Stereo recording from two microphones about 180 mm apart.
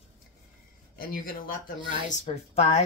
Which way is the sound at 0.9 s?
55° left (ahead or behind).